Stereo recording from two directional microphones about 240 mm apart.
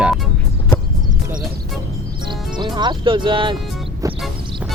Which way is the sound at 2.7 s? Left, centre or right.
Centre.